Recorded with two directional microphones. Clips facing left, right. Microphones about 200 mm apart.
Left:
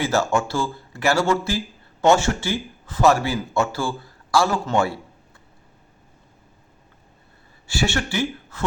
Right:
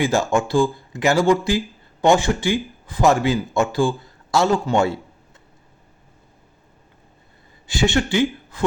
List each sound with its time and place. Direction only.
0.0 s speech: 15° right (ahead or behind)
7.7 s speech: 20° right (ahead or behind)